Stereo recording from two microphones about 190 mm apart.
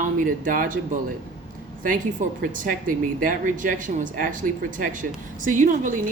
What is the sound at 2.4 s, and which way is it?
Speech, 45° right (ahead or behind).